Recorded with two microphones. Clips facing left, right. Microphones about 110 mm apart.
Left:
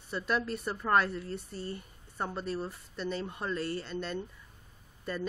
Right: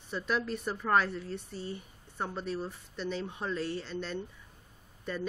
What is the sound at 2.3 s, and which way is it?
Speech, centre (ahead or behind).